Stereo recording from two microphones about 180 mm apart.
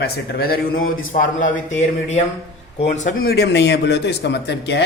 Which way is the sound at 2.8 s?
40° left (ahead or behind).